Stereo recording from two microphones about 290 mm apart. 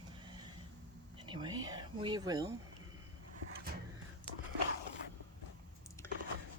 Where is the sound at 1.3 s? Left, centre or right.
Centre.